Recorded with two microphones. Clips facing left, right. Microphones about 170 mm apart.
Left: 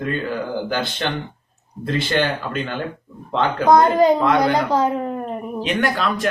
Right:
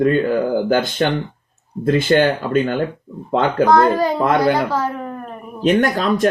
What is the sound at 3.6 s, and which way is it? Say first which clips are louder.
Speech: left 3 dB; 20° left (ahead or behind).